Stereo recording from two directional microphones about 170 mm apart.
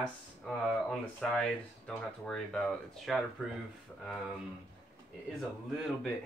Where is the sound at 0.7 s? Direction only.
5° left (ahead or behind).